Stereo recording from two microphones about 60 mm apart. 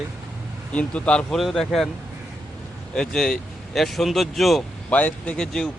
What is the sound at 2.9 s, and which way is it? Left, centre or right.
Speech, centre.